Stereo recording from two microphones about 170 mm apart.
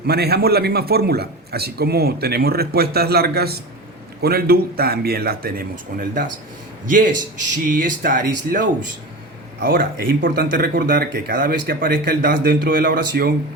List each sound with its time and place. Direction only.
0.0 s a man's voice: 70° right (ahead or behind)
7.5 s speech: 50° right (ahead or behind)